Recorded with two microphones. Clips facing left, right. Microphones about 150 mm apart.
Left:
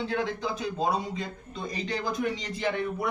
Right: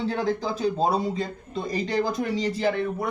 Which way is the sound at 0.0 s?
35° right (ahead or behind).